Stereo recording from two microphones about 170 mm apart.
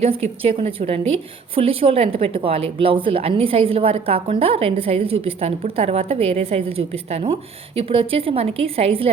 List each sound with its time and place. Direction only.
0.0 s a woman's voice: 35° right (ahead or behind)